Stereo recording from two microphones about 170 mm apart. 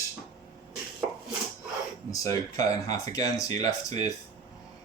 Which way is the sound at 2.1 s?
20° left (ahead or behind).